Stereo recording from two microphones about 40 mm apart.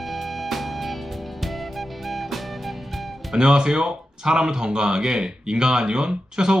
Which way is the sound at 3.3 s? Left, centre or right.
Centre.